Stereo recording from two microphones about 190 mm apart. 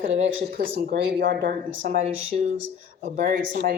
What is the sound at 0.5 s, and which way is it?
Speech, 55° right (ahead or behind).